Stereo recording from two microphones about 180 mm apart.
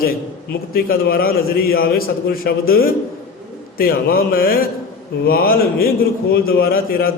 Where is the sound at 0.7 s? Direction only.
55° left (ahead or behind).